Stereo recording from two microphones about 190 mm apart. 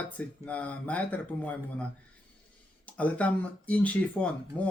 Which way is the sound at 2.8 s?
5° left (ahead or behind).